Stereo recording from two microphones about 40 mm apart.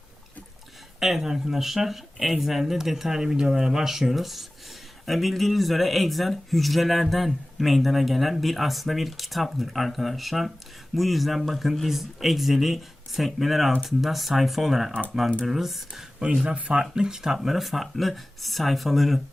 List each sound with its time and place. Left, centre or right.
0.9 s speech: centre
16.2 s speech: right; by 19.2 s centre